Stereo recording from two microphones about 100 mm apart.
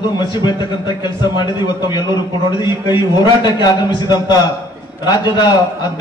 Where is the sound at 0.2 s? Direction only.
50° left (ahead or behind).